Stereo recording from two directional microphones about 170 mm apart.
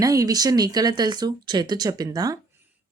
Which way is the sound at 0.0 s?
20° right (ahead or behind).